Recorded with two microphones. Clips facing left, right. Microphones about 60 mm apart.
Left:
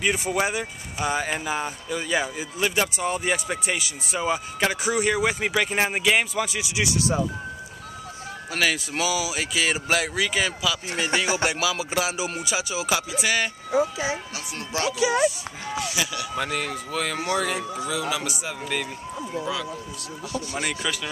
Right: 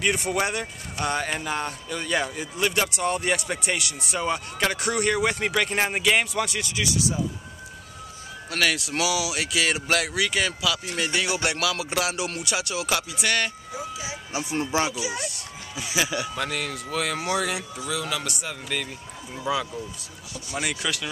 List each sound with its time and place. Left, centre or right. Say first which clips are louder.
0.0 s speech: left 1 dB; centre
8.5 s speech: even; centre
13.7 s speech: left 10 dB; left
14.3 s speech: right 5 dB; right
15.0 s speech: left 8 dB; left
15.8 s speech: right 3 dB; right
16.3 s speech: left 2 dB; centre
19.4 s speech: right 6 dB; centre
20.5 s speech: right 2 dB; centre